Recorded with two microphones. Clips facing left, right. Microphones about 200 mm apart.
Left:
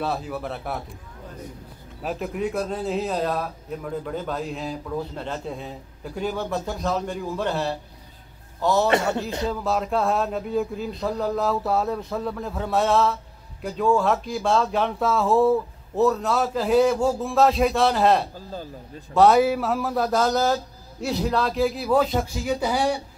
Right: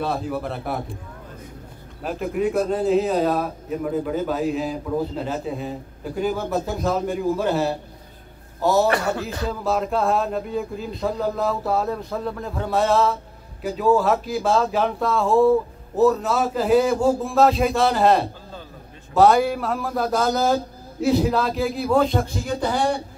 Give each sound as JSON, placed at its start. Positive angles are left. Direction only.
{"t": 0.0, "sound": "a man's voice", "side_deg": 0}
{"t": 2.0, "sound": "a man's voice", "side_deg": 0}
{"t": 8.8, "sound": "speech", "side_deg": 25}
{"t": 9.5, "sound": "a man's voice", "side_deg": 0}